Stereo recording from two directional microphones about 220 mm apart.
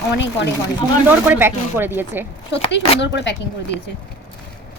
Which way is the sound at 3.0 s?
50° left (ahead or behind).